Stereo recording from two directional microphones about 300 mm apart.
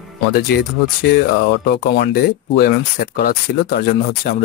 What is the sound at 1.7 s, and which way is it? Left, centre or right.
Speech, left.